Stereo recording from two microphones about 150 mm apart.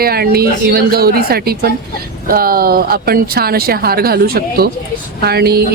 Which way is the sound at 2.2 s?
75° right (ahead or behind).